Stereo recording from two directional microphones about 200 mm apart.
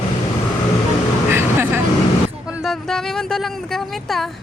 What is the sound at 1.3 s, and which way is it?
Vehicle, 10° right (ahead or behind).